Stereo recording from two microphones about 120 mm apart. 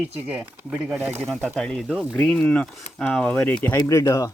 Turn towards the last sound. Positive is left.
turn(degrees=25)  # may be behind; listen again after turning